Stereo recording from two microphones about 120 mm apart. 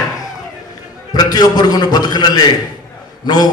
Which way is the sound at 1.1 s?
35° left (ahead or behind).